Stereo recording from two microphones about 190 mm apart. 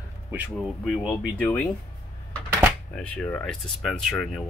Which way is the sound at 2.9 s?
5° left (ahead or behind).